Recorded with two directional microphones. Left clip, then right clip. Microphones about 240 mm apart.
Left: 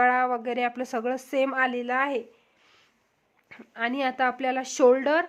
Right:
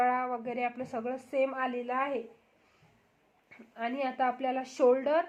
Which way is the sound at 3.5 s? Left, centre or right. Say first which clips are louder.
Left 6 dB; left.